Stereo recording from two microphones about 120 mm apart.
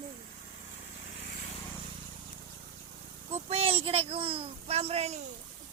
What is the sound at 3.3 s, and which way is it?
Speech, 55° right (ahead or behind).